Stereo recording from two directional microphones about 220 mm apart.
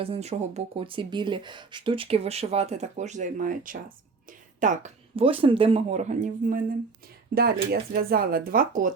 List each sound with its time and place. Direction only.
0.0 s speech: 30° right (ahead or behind)